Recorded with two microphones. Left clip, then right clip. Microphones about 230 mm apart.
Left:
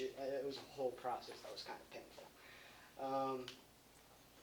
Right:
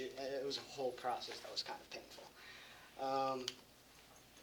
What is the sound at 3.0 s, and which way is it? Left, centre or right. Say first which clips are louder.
Speech: right 3 dB; right.